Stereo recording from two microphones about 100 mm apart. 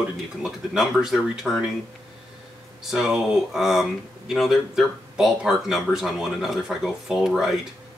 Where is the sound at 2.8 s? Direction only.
5° right (ahead or behind).